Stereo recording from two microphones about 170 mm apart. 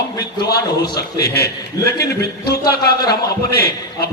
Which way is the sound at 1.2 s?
65° left (ahead or behind).